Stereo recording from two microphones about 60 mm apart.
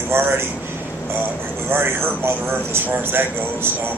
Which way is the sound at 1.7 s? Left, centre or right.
Right.